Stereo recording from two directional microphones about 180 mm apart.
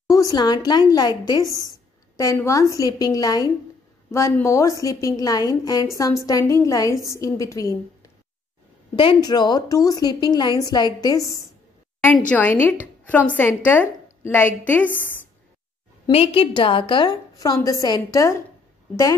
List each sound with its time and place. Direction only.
0.0 s a woman's voice: 20° left (ahead or behind)
8.9 s a woman's voice: 25° left (ahead or behind)
16.1 s a woman's voice: 30° left (ahead or behind)